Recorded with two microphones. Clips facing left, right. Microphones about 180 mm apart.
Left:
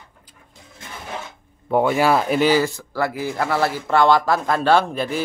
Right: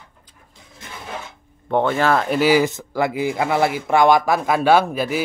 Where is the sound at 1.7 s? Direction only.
10° left (ahead or behind).